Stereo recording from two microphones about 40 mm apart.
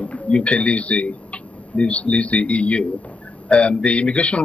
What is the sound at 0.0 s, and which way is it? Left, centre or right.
Speech, left.